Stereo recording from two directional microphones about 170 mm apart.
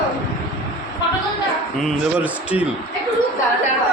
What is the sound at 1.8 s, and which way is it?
Speech, 10° right (ahead or behind).